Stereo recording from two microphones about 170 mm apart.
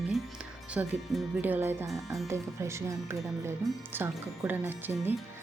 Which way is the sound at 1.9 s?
Centre (ahead or behind).